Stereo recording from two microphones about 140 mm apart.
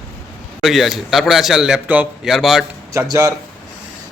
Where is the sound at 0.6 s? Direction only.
Centre (ahead or behind).